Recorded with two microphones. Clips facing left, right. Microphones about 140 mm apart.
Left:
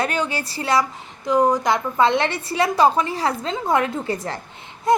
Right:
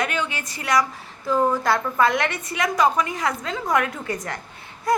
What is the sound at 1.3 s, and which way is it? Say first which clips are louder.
A woman's voice: left 3 dB; 15° left (ahead or behind).